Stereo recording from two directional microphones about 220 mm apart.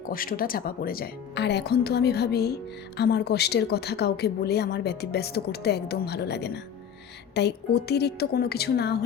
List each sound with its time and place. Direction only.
0.0 s speech: 40° left (ahead or behind)